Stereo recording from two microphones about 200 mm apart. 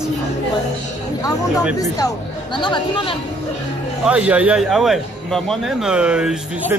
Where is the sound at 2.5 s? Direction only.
25° left (ahead or behind).